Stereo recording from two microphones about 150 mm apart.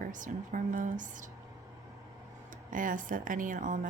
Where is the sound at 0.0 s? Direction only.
60° right (ahead or behind).